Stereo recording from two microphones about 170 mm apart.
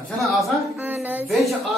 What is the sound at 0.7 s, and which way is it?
Speech, 10° right (ahead or behind).